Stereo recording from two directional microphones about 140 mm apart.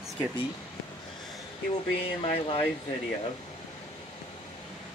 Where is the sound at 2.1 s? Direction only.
40° left (ahead or behind).